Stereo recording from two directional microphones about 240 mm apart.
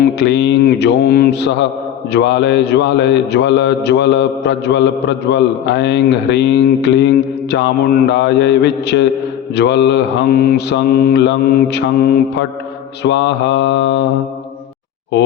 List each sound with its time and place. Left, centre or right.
0.0 s speech: left
7.5 s speech: left